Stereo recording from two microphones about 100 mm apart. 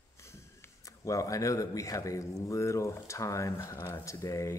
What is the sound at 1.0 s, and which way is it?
Speech, 35° left (ahead or behind).